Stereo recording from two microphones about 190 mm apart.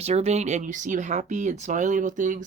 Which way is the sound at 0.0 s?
35° right (ahead or behind).